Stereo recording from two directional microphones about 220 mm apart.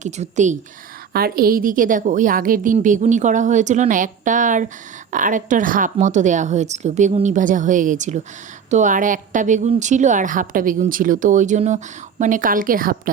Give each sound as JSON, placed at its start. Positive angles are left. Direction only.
{"t": 0.0, "sound": "a woman's voice", "side_deg": -35}